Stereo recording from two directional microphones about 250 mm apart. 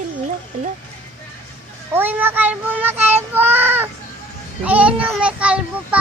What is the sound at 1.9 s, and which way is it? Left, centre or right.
Child singing, centre.